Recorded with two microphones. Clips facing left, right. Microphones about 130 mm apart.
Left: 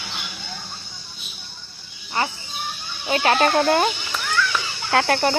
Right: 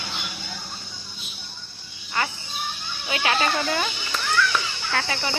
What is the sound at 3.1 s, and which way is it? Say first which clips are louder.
Speech: left 6 dB; 40° left (ahead or behind).